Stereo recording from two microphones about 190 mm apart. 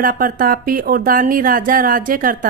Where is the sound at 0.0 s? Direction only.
45° right (ahead or behind).